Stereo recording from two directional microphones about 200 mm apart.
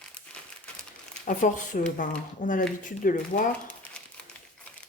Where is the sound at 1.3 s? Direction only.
40° left (ahead or behind).